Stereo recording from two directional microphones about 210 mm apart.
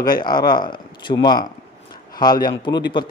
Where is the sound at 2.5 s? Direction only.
20° left (ahead or behind).